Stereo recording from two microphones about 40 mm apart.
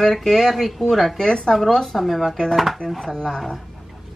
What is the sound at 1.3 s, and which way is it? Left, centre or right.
Speech, centre.